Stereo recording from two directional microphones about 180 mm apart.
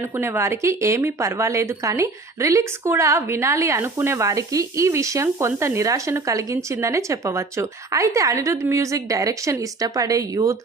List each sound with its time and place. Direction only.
0.2 s a woman's voice: 15° right (ahead or behind)